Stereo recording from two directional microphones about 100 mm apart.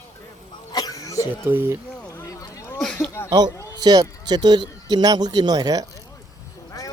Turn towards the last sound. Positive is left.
turn(degrees=-40)  # may be behind; listen again after turning